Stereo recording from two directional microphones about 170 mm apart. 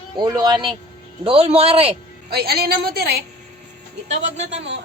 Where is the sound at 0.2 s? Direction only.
25° right (ahead or behind).